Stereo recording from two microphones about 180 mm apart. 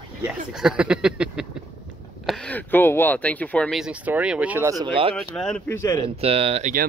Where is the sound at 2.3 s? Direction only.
10° left (ahead or behind); by 4.7 s 10° right (ahead or behind).